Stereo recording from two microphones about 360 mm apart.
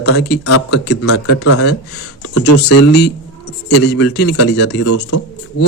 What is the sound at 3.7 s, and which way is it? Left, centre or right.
Speech, left.